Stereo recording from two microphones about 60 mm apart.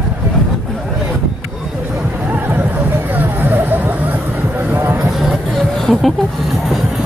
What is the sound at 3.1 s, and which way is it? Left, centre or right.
Hubbub, right.